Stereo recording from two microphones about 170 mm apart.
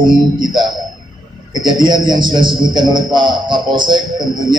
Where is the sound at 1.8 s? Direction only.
25° right (ahead or behind).